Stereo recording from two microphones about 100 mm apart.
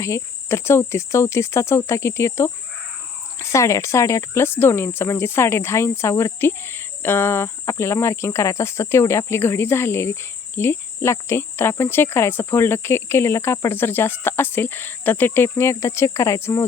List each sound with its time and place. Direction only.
0.0 s speech: 25° left (ahead or behind)